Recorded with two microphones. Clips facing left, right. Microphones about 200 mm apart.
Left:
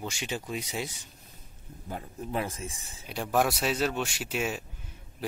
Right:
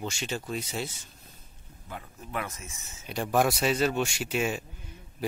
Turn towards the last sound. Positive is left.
turn(degrees=5)  # may be behind; listen again after turning